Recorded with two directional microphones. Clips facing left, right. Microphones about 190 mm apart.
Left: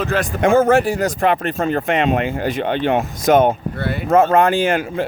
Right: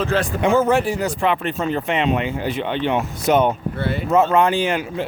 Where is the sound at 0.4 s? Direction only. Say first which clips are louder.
Left 4 dB; 45° left (ahead or behind).